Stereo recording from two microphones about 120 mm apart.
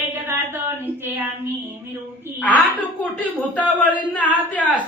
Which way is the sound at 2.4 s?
15° left (ahead or behind).